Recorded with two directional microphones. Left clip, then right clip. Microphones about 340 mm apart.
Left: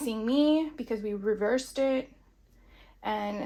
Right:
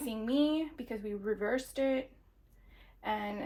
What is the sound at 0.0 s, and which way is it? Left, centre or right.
Speech, centre.